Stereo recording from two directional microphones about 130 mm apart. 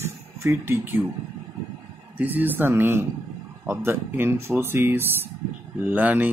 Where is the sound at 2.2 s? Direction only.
15° right (ahead or behind).